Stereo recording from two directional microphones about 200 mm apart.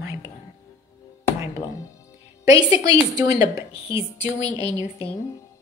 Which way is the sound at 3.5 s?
30° left (ahead or behind).